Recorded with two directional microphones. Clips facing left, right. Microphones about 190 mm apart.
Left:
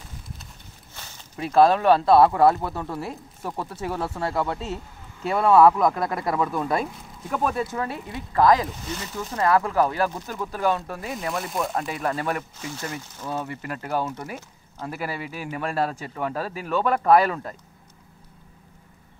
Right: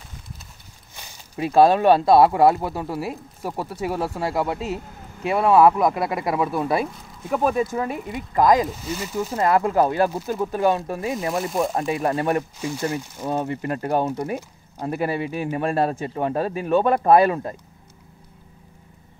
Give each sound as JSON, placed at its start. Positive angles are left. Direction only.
{"t": 0.9, "sound": "speech", "side_deg": -15}
{"t": 12.5, "sound": "speech", "side_deg": -10}
{"t": 13.2, "sound": "speech", "side_deg": -25}